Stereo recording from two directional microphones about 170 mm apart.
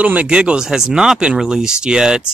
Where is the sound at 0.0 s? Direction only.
10° right (ahead or behind).